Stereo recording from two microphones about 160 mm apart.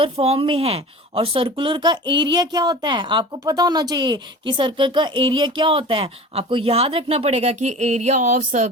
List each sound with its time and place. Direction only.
0.0 s a woman's voice: 35° right (ahead or behind)